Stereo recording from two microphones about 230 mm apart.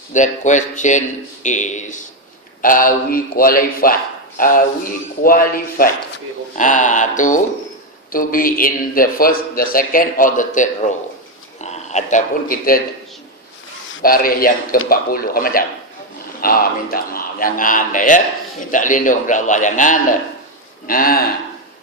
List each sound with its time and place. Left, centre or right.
0.1 s speech: left
14.0 s speech: left